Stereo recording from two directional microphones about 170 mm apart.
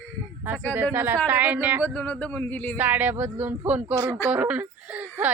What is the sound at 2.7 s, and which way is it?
Speech, 10° right (ahead or behind).